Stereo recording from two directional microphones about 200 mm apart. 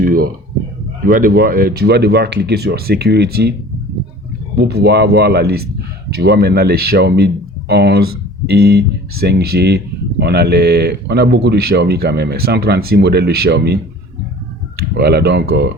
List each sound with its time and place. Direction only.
0.0 s speech: 45° right (ahead or behind)
4.5 s speech: 55° right (ahead or behind)
14.9 s speech: 55° right (ahead or behind)